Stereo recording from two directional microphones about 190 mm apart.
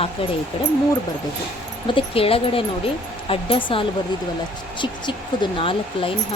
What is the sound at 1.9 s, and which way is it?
Speech, 30° left (ahead or behind).